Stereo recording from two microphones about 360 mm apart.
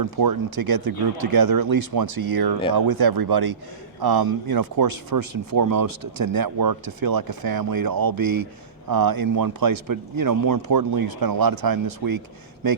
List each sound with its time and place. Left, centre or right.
0.0 s speech: right
0.9 s speech: right